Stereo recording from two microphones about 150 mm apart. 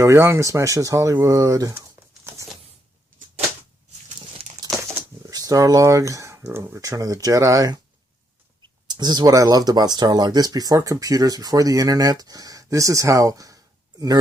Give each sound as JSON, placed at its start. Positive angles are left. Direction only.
{"t": 0.0, "sound": "speech", "side_deg": -20}
{"t": 4.4, "sound": "crumpling", "side_deg": -40}
{"t": 4.8, "sound": "speech", "side_deg": -20}
{"t": 8.9, "sound": "speech", "side_deg": -30}